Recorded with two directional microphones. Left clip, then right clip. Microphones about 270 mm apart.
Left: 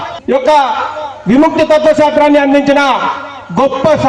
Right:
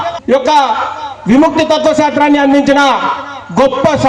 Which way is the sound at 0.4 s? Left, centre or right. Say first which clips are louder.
Left 2 dB; right.